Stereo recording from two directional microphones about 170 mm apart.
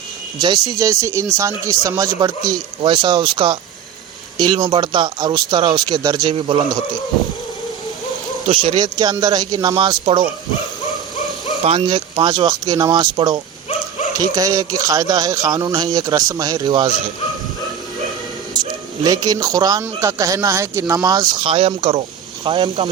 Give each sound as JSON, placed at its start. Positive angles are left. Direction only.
{"t": 0.3, "sound": "speech", "side_deg": -25}
{"t": 8.4, "sound": "speech", "side_deg": -30}
{"t": 11.6, "sound": "speech", "side_deg": -30}
{"t": 18.5, "sound": "speech", "side_deg": -25}